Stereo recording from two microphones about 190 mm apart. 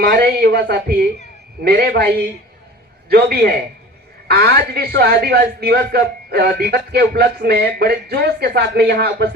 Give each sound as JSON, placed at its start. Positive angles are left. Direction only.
{"t": 0.0, "sound": "a man's voice", "side_deg": -50}
{"t": 3.1, "sound": "a man's voice", "side_deg": -55}